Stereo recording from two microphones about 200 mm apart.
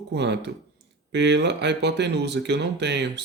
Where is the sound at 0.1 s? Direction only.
60° right (ahead or behind).